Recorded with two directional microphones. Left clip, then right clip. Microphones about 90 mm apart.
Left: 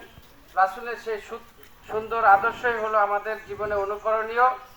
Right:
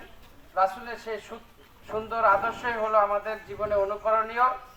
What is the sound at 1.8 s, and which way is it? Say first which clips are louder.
A man's voice: left 4 dB; 10° right (ahead or behind).